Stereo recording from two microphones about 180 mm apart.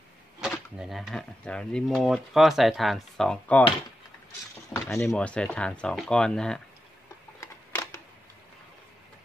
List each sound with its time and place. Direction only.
0.7 s speech: centre (ahead or behind)
4.7 s a sound: 15° left (ahead or behind)
5.0 s speech: 5° left (ahead or behind)
7.3 s camera: 15° left (ahead or behind)